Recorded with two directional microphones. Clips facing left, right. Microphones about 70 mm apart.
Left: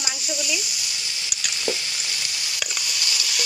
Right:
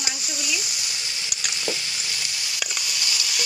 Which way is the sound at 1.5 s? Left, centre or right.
Centre.